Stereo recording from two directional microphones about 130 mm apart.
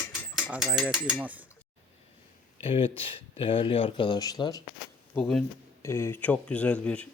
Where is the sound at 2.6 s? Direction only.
45° left (ahead or behind); by 4.6 s 30° left (ahead or behind).